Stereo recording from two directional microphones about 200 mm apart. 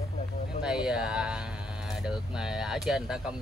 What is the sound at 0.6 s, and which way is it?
Speech, 5° right (ahead or behind).